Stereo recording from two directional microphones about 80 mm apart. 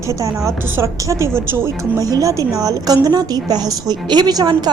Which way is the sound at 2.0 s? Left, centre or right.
Right.